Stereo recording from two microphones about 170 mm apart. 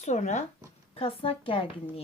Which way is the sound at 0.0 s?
45° left (ahead or behind).